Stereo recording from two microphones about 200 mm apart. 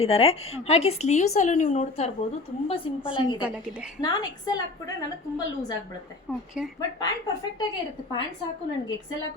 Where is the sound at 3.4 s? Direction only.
5° right (ahead or behind).